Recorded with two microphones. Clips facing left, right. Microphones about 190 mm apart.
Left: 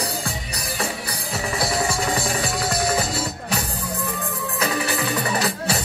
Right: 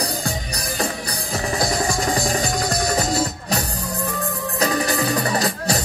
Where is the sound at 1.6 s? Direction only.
40° right (ahead or behind).